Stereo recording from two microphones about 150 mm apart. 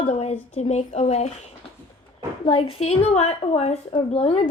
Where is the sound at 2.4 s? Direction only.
40° left (ahead or behind).